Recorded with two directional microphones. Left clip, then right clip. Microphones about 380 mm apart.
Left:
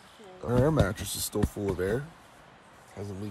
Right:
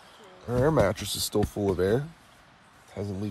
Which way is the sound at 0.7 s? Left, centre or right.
Centre.